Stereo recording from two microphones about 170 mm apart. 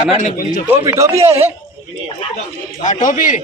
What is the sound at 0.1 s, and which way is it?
Speech, 40° left (ahead or behind).